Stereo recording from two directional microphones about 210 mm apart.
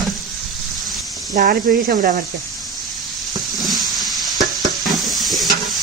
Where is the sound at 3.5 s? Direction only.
Centre (ahead or behind).